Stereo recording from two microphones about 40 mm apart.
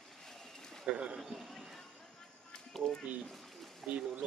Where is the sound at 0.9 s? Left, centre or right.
Right.